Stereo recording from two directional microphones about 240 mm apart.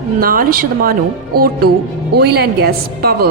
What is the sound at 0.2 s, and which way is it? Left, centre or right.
A woman's voice, right.